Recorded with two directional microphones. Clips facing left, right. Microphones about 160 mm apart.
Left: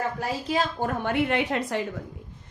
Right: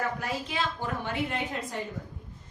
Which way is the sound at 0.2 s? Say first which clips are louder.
Left 5 dB; 40° left (ahead or behind).